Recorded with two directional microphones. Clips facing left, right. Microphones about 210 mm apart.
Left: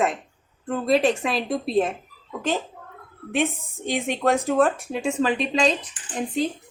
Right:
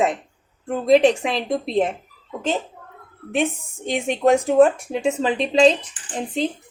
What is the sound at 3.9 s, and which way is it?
Speech, 20° right (ahead or behind).